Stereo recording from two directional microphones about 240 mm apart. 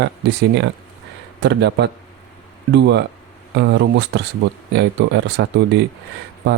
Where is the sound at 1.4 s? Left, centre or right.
Right.